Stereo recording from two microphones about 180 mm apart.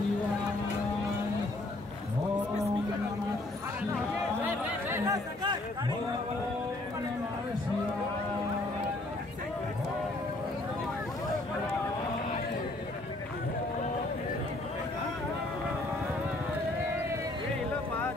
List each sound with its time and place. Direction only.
4.8 s chatter: 15° right (ahead or behind)